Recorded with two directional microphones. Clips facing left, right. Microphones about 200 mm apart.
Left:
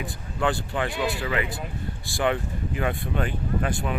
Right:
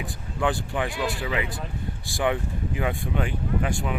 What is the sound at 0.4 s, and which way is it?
Speech, 15° right (ahead or behind).